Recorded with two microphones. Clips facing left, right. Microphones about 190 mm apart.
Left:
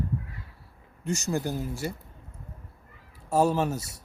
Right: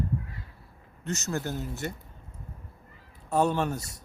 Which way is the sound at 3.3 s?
5° left (ahead or behind).